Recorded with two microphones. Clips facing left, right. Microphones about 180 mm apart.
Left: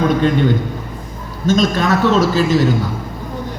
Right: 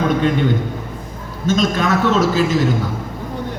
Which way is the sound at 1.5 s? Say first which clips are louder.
Left 2 dB; 35° left (ahead or behind).